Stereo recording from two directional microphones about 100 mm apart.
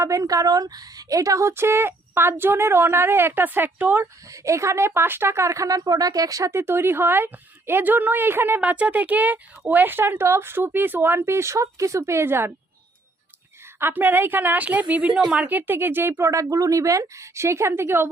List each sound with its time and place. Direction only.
0.0 s a woman's voice: 30° right (ahead or behind)
4.3 s a woman's voice: 30° right (ahead or behind)
13.7 s a woman's voice: 20° right (ahead or behind)